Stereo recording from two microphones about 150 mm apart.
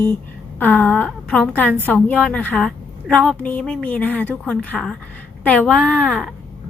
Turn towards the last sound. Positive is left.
turn(degrees=5)  # may be behind; listen again after turning